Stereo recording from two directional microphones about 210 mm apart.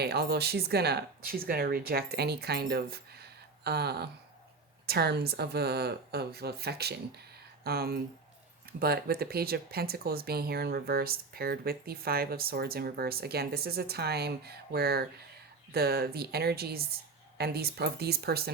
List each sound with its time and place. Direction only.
0.0 s speech: 50° right (ahead or behind)